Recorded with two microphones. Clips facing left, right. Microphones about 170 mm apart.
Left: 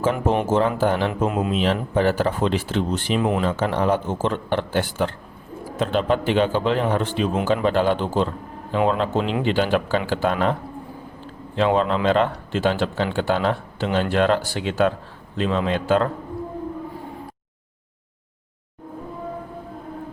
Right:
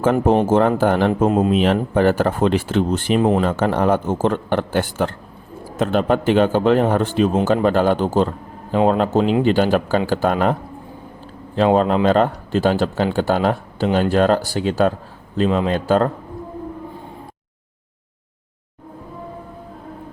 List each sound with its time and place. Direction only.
0.4 s a man's voice: 55° right (ahead or behind)
3.2 s speech: 35° right (ahead or behind)
3.4 s a man's voice: 50° right (ahead or behind)
11.5 s speech: 40° right (ahead or behind)